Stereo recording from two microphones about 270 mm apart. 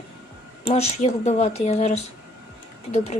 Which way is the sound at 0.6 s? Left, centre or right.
Left.